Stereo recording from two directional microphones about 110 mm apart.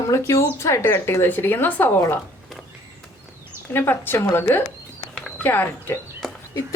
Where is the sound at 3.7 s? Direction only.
20° left (ahead or behind).